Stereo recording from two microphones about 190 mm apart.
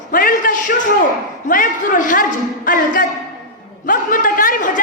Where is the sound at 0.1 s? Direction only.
45° left (ahead or behind).